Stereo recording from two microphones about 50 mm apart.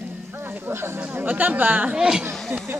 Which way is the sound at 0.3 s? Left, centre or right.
Right.